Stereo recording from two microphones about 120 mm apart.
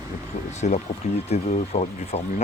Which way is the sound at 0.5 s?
70° left (ahead or behind).